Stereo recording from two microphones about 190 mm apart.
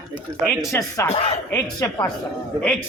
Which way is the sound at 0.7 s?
15° left (ahead or behind).